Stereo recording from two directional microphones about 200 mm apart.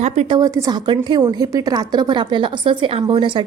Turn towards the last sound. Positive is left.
turn(degrees=-25)  # may be behind; listen again after turning